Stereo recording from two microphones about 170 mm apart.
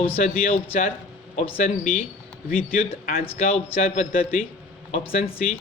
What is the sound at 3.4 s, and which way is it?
Speech, 40° left (ahead or behind).